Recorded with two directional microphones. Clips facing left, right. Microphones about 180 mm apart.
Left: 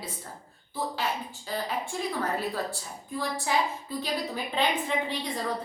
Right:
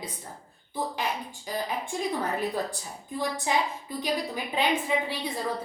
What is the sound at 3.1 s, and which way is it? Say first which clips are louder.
A woman's voice: right 1 dB; 20° right (ahead or behind).